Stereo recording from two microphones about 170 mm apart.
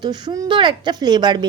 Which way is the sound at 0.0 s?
25° right (ahead or behind).